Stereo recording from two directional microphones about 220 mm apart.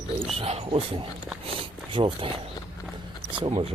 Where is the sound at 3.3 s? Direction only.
25° right (ahead or behind).